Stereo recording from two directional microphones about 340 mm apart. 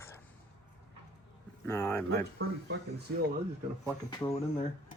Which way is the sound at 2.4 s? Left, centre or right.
Right.